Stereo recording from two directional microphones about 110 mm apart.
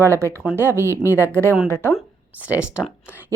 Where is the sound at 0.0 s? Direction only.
25° right (ahead or behind).